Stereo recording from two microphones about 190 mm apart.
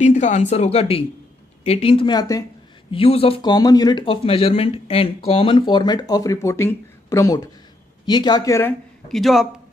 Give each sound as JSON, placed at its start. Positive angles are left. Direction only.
{"t": 0.0, "sound": "speech", "side_deg": 35}
{"t": 2.9, "sound": "speech", "side_deg": 30}
{"t": 9.1, "sound": "speech", "side_deg": 0}